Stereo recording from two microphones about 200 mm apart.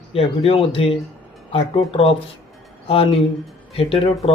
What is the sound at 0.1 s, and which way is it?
Speech, 30° left (ahead or behind).